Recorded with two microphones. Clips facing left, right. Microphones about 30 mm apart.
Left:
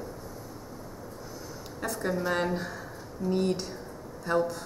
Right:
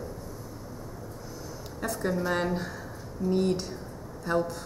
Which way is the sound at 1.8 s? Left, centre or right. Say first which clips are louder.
Right 1 dB; centre.